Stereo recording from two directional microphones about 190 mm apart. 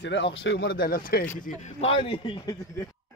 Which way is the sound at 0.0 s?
70° left (ahead or behind).